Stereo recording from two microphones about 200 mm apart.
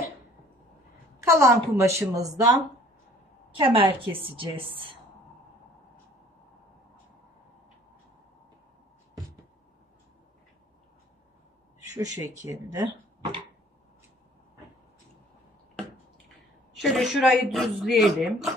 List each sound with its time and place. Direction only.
1.2 s a woman's voice: 15° right (ahead or behind)
11.8 s speech: 15° right (ahead or behind)
16.7 s speech: centre (ahead or behind)